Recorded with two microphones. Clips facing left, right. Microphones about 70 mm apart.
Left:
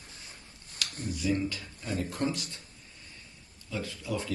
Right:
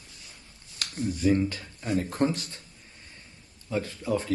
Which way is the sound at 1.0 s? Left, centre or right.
Right.